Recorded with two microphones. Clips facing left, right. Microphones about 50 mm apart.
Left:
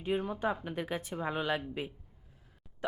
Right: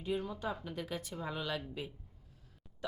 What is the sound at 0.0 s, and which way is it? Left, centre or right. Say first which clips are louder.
A woman's voice: left 5 dB; left.